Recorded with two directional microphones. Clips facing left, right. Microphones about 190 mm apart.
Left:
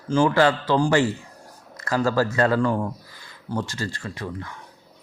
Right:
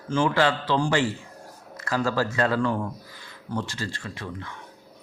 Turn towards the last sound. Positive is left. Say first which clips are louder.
# left 3 dB
turn(degrees=40)  # may be behind; listen again after turning